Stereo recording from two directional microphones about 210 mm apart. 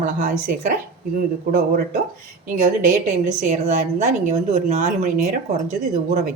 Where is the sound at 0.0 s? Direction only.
40° right (ahead or behind).